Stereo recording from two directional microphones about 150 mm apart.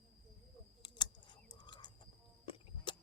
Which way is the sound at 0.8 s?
30° left (ahead or behind).